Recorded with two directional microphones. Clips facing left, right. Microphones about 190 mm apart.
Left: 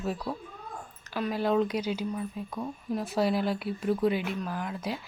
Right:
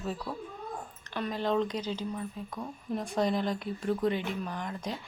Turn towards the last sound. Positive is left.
turn(degrees=5)  # may be behind; listen again after turning